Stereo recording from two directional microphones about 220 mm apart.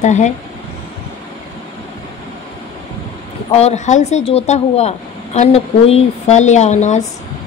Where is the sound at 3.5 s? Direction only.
30° left (ahead or behind).